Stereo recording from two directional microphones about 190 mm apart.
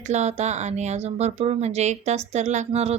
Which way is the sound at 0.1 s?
35° right (ahead or behind).